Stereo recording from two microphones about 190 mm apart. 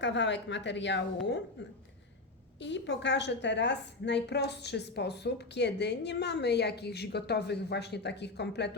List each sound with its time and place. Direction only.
0.0 s a woman's voice: 70° left (ahead or behind)
2.6 s a woman's voice: 70° left (ahead or behind)